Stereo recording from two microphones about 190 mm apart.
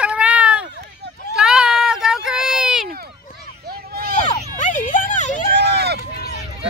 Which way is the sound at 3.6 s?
55° right (ahead or behind).